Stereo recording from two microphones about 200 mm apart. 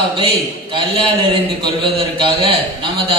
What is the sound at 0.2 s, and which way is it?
A man's voice, 25° right (ahead or behind).